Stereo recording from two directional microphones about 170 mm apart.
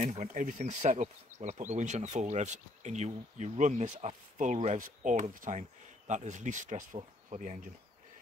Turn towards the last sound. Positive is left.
turn(degrees=-45)  # may be behind; listen again after turning